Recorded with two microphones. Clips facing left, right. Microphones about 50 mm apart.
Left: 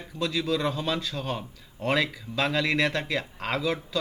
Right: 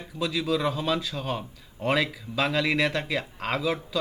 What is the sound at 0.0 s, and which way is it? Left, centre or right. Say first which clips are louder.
A man's voice: even; centre.